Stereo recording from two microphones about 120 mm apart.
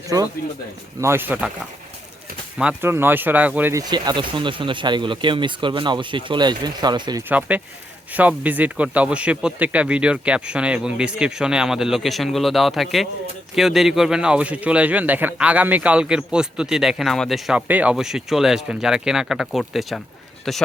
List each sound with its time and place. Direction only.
1.0 s speech: 20° right (ahead or behind)
2.6 s speech: 15° right (ahead or behind)
3.8 s speech: 35° right (ahead or behind)
7.3 s speech: 10° right (ahead or behind)
17.7 s speech: 10° right (ahead or behind)